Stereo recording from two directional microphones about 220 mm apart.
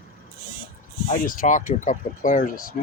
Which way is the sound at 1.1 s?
40° left (ahead or behind).